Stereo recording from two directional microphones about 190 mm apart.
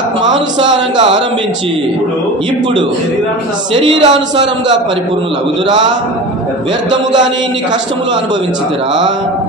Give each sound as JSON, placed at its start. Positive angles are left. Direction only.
{"t": 0.2, "sound": "a sound", "side_deg": -25}
{"t": 3.7, "sound": "speech", "side_deg": -25}
{"t": 6.9, "sound": "speech", "side_deg": -20}